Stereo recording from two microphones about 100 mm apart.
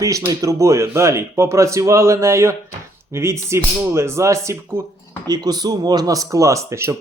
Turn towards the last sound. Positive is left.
turn(degrees=-30)  # may be behind; listen again after turning